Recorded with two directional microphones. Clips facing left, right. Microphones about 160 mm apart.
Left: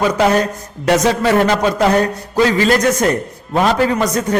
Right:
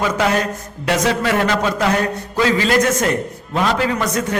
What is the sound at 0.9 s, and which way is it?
A man's voice, 35° left (ahead or behind).